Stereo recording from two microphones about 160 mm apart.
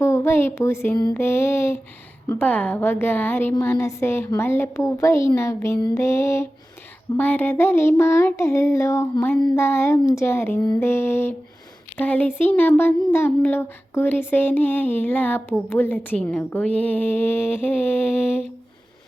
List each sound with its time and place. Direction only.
0.0 s speech: 15° left (ahead or behind)